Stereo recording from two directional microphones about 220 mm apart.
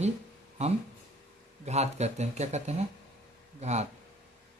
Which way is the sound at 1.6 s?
30° right (ahead or behind).